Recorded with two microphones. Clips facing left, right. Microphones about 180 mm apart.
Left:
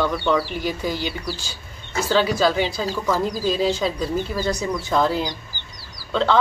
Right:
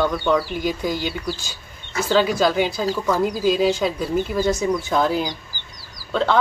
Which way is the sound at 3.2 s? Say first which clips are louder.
Right 6 dB; 10° right (ahead or behind).